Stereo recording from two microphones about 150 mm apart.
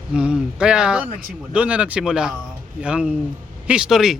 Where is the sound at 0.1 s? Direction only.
5° right (ahead or behind).